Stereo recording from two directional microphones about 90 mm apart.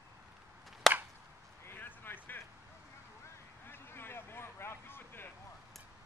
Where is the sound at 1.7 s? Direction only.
25° left (ahead or behind).